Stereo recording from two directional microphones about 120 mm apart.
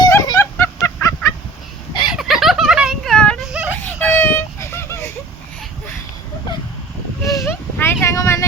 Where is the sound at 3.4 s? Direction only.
5° right (ahead or behind).